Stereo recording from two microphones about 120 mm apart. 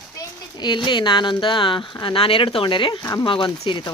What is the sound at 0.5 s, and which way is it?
Speech, 40° left (ahead or behind).